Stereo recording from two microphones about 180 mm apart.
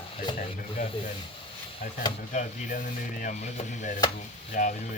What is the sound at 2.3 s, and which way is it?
Speech, 45° left (ahead or behind).